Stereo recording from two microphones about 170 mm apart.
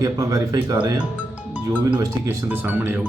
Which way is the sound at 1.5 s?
10° right (ahead or behind).